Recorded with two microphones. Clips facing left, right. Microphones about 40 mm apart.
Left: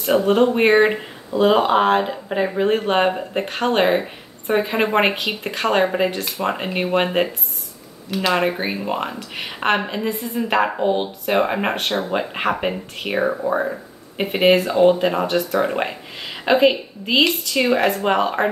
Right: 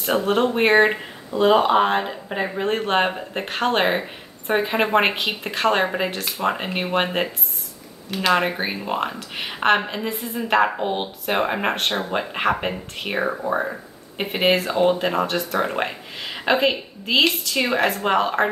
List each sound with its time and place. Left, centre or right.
0.3 s speech: centre
5.3 s speech: centre
10.8 s speech: centre
11.3 s speech: centre